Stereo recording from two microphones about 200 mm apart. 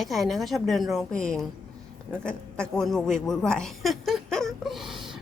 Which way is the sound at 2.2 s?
5° left (ahead or behind).